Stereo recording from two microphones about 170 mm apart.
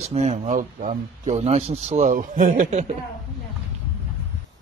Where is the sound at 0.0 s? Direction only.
40° right (ahead or behind).